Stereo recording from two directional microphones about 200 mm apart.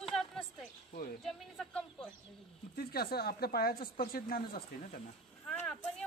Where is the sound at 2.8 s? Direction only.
50° left (ahead or behind).